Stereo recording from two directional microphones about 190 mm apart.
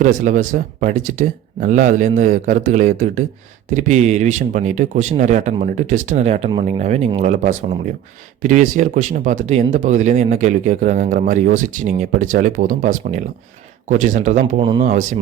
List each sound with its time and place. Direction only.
0.0 s speech: 40° right (ahead or behind)